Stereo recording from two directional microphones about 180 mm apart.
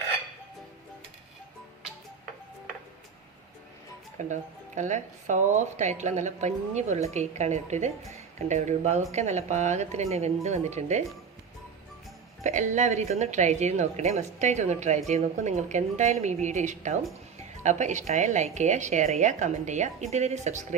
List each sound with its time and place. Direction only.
4.3 s a woman's voice: 40° right (ahead or behind)
12.4 s a woman's voice: 40° right (ahead or behind)